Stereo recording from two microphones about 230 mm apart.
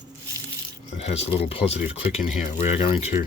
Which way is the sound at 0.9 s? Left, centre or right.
Left.